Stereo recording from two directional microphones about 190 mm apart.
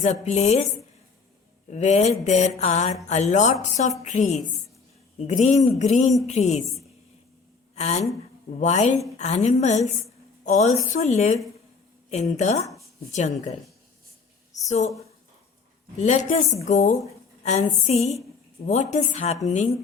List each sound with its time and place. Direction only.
0.0 s a woman's voice: 35° left (ahead or behind)
1.7 s a woman's voice: 35° left (ahead or behind)
7.8 s a woman's voice: 35° left (ahead or behind)
12.6 s a sound: 15° left (ahead or behind)
13.1 s a woman's voice: 35° left (ahead or behind)
14.7 s a woman's voice: 40° left (ahead or behind)
16.0 s a woman's voice: 40° left (ahead or behind)
17.4 s a sound: 35° left (ahead or behind)
17.8 s a woman's voice: 35° left (ahead or behind)